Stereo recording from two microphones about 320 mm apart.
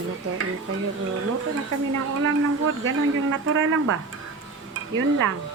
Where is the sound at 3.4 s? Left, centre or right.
Right.